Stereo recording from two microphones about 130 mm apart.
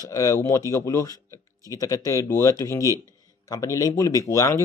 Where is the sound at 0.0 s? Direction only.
25° left (ahead or behind).